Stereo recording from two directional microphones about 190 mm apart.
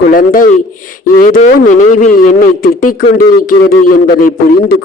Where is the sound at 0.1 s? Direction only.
45° left (ahead or behind).